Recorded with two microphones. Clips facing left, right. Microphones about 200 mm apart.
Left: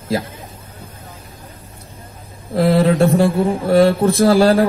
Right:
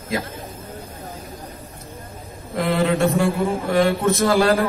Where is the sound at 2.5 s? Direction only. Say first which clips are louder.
Left 6 dB; 30° left (ahead or behind).